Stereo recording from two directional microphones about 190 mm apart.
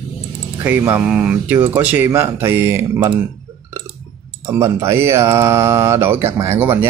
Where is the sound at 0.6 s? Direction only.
10° right (ahead or behind).